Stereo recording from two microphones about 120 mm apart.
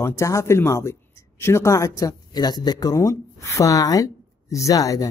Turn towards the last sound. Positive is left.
turn(degrees=30)  # may be behind; listen again after turning